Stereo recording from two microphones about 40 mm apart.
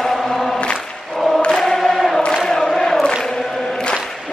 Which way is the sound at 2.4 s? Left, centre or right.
Centre.